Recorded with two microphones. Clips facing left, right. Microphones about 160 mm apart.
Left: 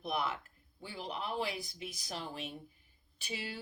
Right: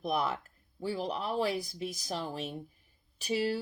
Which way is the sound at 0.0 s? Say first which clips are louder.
Right 5 dB; 40° right (ahead or behind).